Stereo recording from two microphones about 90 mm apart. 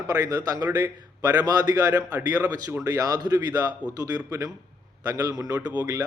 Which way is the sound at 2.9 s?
45° right (ahead or behind).